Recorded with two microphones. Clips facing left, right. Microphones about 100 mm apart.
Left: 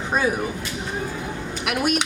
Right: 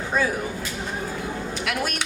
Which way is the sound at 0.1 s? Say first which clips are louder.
Left 2 dB; 20° left (ahead or behind).